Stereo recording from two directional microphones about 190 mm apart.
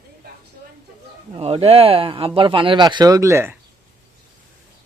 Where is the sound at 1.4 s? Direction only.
30° right (ahead or behind); by 3.5 s 15° right (ahead or behind).